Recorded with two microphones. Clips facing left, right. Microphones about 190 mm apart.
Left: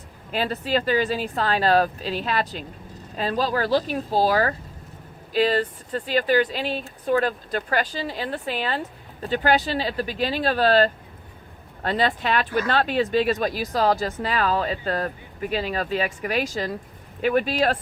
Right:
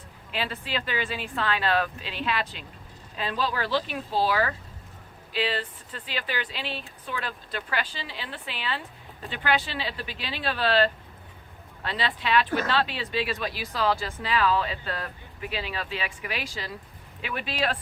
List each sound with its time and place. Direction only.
0.3 s a woman's voice: 40° left (ahead or behind)